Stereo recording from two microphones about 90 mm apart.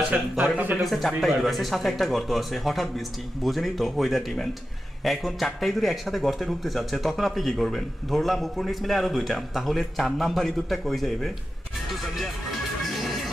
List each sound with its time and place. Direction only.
0.1 s speech: 15° right (ahead or behind)
0.7 s speech: centre (ahead or behind)
12.2 s music: centre (ahead or behind)